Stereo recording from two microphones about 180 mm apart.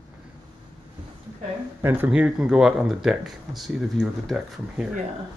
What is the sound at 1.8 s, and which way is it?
Speech, 10° right (ahead or behind).